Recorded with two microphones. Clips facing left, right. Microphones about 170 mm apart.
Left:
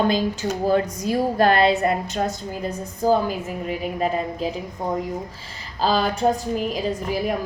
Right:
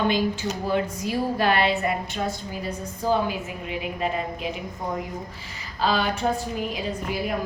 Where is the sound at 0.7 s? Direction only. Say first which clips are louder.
Left 4 dB; 45° left (ahead or behind).